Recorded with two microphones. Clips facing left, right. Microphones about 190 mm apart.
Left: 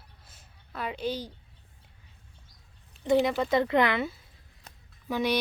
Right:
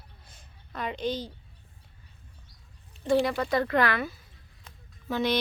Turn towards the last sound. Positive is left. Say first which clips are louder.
# even
turn(degrees=10)  # may be behind; listen again after turning